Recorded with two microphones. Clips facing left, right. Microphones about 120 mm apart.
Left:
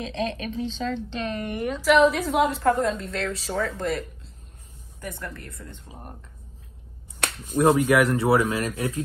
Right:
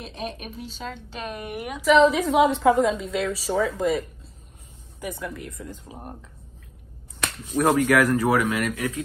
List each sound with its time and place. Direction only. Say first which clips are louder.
0.0 s a woman's voice: left 5 dB; 90° left
0.7 s a woman's voice: left 7 dB; 10° right (ahead or behind)
5.0 s a woman's voice: right 4 dB; 5° right (ahead or behind)
7.6 s speech: left 1 dB; 25° left (ahead or behind)